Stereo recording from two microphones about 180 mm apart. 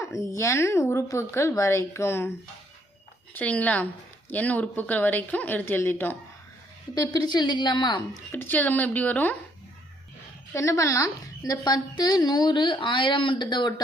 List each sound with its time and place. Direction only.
0.0 s a woman's voice: 15° left (ahead or behind)
3.3 s a woman's voice: 10° left (ahead or behind); by 8.2 s 25° left (ahead or behind)
8.3 s a woman's voice: 10° left (ahead or behind)
10.5 s a woman's voice: 15° left (ahead or behind)